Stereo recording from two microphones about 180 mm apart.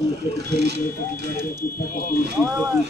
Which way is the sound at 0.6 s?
65° right (ahead or behind).